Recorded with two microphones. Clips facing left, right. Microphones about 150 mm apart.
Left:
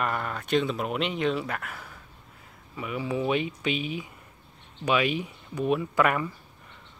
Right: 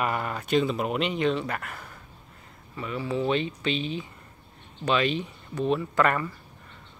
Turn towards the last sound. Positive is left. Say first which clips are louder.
# even
turn(degrees=10)  # may be behind; listen again after turning